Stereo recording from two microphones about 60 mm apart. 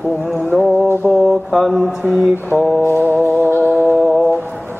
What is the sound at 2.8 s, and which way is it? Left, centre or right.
Music, right.